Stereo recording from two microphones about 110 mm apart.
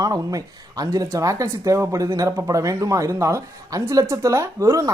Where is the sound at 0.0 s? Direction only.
35° right (ahead or behind).